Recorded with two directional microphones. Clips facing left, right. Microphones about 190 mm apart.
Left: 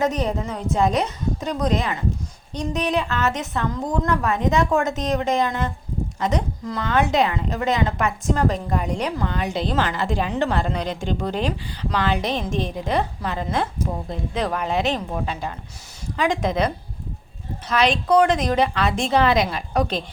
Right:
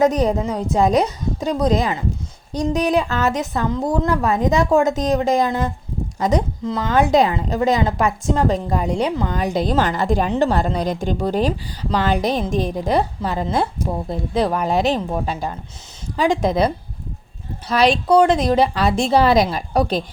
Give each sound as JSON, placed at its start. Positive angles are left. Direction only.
{"t": 0.0, "sound": "a woman's voice", "side_deg": -35}